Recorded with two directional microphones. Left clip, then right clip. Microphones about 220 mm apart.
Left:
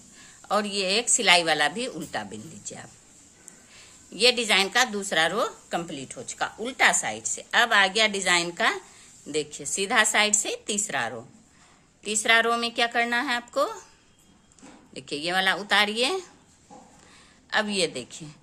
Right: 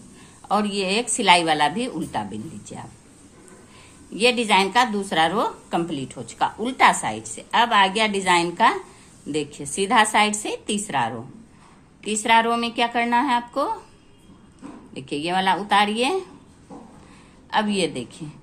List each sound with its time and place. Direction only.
0.2 s a woman's voice: 25° left (ahead or behind)
4.1 s a woman's voice: 25° left (ahead or behind)
14.9 s a woman's voice: 25° left (ahead or behind)
17.5 s a woman's voice: 25° left (ahead or behind)